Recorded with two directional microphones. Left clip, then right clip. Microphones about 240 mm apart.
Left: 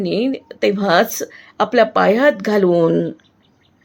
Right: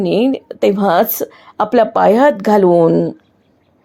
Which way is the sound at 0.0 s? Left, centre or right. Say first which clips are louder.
Right 5 dB; centre.